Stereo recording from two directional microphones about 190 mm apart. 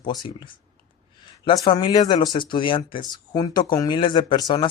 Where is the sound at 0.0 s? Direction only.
25° left (ahead or behind).